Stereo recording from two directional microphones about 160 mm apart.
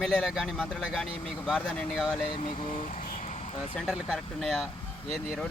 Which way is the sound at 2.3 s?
45° left (ahead or behind).